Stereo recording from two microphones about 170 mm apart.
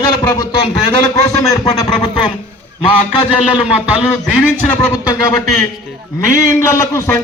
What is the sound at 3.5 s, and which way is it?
Speech, 5° right (ahead or behind).